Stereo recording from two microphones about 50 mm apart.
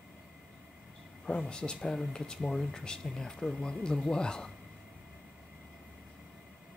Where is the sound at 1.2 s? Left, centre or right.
Centre.